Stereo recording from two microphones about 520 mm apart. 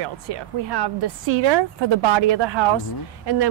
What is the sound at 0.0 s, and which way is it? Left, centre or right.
Speech, right.